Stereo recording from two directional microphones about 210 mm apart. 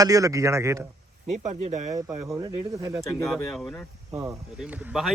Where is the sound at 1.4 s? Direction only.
35° right (ahead or behind).